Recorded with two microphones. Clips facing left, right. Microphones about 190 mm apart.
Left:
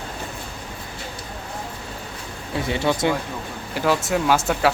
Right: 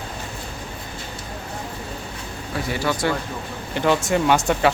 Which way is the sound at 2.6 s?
25° left (ahead or behind).